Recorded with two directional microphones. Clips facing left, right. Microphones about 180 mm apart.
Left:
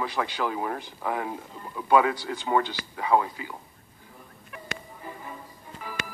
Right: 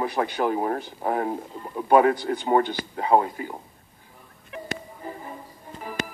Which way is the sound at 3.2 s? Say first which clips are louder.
Right 6 dB; 45° right (ahead or behind).